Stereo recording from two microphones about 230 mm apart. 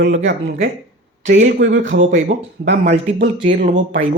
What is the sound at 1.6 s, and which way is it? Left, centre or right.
Speech, right.